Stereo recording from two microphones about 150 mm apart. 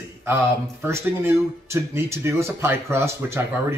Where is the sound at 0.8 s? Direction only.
20° right (ahead or behind).